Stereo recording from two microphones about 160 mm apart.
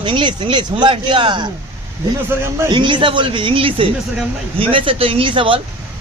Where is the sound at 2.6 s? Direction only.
30° right (ahead or behind).